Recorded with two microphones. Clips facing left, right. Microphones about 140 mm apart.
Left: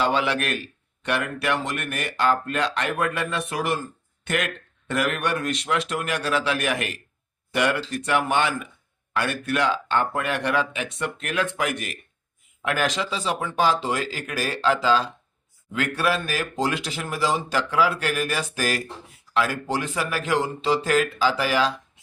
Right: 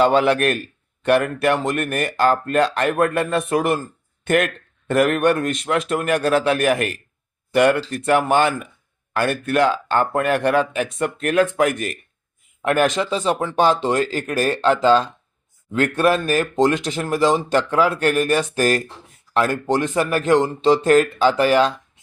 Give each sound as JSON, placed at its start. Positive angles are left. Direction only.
{"t": 0.0, "sound": "a man's voice", "side_deg": -45}
{"t": 4.2, "sound": "a sound", "side_deg": -50}
{"t": 4.9, "sound": "a man's voice", "side_deg": -50}